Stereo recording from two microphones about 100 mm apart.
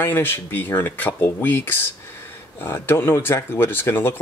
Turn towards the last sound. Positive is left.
turn(degrees=20)  # may be behind; listen again after turning